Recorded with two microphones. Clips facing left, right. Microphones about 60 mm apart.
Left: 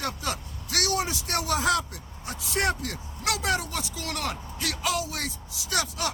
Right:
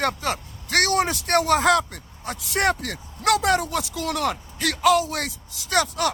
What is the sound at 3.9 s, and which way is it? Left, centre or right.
Speech, right.